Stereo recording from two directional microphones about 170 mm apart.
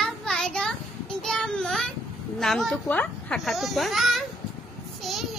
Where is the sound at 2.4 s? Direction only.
Centre (ahead or behind).